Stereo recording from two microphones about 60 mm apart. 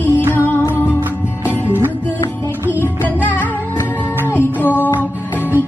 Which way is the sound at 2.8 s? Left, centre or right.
Left.